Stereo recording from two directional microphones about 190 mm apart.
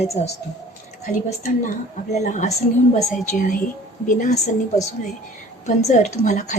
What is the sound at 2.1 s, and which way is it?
Speech, 40° left (ahead or behind).